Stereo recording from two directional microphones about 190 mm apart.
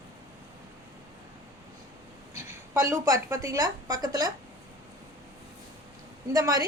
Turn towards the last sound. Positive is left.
turn(degrees=-20)  # may be behind; listen again after turning